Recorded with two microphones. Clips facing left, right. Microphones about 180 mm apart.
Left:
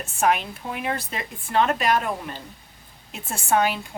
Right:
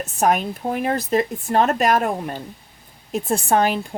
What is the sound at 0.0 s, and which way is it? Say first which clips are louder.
A woman's voice: right 3 dB; 40° right (ahead or behind).